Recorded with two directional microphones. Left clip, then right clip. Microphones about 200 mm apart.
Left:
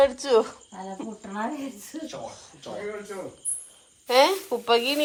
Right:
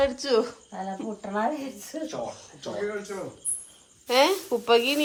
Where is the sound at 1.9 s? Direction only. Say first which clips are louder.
Right 4 dB; 30° right (ahead or behind).